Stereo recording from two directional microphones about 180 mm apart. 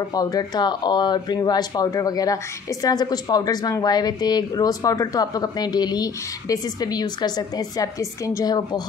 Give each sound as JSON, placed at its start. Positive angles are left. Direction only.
{"t": 0.1, "sound": "speech", "side_deg": 20}